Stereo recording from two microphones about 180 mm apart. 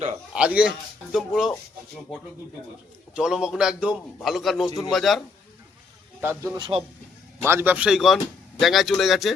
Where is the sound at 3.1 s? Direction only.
5° right (ahead or behind).